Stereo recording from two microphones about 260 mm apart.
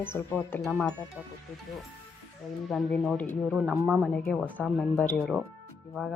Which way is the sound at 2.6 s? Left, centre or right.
Centre.